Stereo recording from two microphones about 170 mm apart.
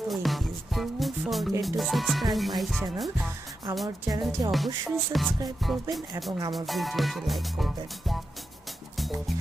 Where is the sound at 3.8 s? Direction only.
20° right (ahead or behind).